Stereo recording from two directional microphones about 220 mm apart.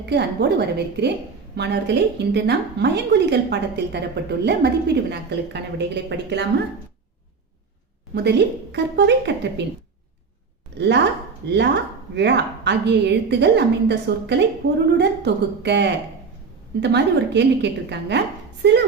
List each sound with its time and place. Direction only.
0.0 s a woman's voice: 50° right (ahead or behind)
8.1 s a woman's voice: 50° right (ahead or behind)
10.8 s a woman's voice: 50° right (ahead or behind)